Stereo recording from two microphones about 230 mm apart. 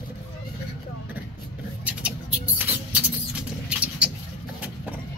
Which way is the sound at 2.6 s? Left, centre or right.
Centre.